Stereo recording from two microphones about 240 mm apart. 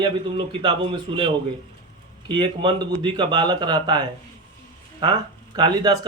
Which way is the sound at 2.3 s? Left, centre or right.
Centre.